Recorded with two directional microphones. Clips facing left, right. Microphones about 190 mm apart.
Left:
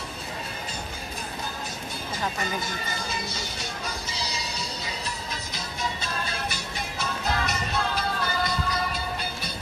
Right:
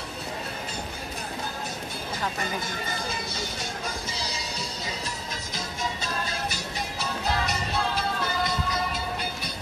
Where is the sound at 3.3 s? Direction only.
50° right (ahead or behind); by 9.5 s 20° right (ahead or behind).